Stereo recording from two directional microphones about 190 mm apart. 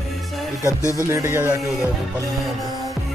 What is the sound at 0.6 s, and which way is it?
Speech, 15° left (ahead or behind).